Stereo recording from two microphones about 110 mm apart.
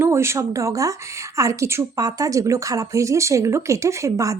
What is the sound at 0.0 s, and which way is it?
A woman's voice, 25° right (ahead or behind).